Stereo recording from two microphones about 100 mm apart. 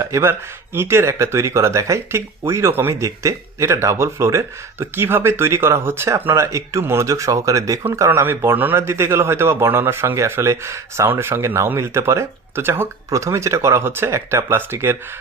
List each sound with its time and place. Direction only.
0.0 s speech: 25° right (ahead or behind)